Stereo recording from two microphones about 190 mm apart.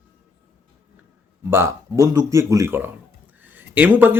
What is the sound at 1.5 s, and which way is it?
Speech, 15° right (ahead or behind).